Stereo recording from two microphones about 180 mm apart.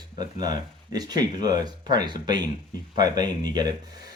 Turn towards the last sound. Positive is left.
turn(degrees=-20)  # may be behind; listen again after turning